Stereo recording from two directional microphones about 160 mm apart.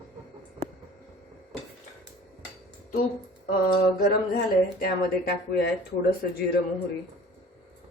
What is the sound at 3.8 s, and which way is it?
Speech, 65° left (ahead or behind).